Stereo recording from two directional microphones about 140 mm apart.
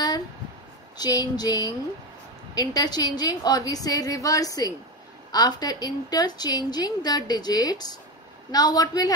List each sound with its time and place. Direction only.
0.9 s a woman's voice: 30° left (ahead or behind)